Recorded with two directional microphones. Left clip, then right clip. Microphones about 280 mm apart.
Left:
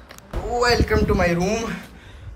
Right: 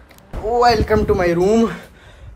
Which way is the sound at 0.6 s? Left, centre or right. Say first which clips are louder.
Right 5 dB; centre.